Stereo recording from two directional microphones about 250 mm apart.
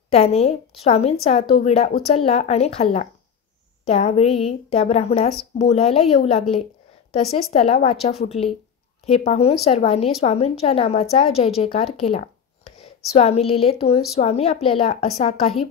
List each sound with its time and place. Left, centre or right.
0.1 s a woman's voice: left